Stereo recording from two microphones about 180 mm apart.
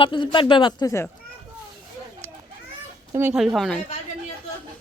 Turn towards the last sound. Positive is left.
turn(degrees=0)  # may be behind; listen again after turning